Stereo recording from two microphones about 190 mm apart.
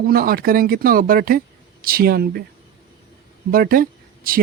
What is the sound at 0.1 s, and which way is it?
Speech, 50° right (ahead or behind).